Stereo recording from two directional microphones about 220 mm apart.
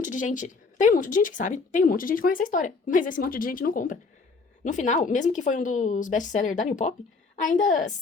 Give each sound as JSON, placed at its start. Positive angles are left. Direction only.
{"t": 0.0, "sound": "a woman's voice", "side_deg": 35}